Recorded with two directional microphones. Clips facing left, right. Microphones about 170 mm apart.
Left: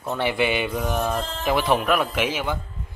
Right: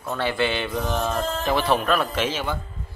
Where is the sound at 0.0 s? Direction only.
20° left (ahead or behind).